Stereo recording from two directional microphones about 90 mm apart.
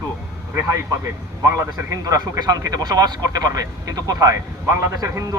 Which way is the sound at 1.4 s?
35° right (ahead or behind).